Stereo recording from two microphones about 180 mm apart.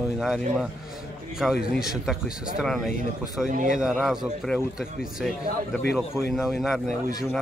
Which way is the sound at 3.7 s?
Centre (ahead or behind).